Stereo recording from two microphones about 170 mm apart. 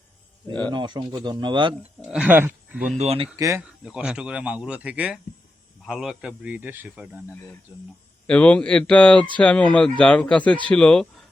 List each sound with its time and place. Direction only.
0.7 s speech: 25° right (ahead or behind)
2.0 s a man's voice: 5° right (ahead or behind)
3.0 s speech: 35° right (ahead or behind)
3.3 s a man's voice: 20° right (ahead or behind)
3.6 s a man's voice: 5° right (ahead or behind)
8.3 s speech: 10° left (ahead or behind)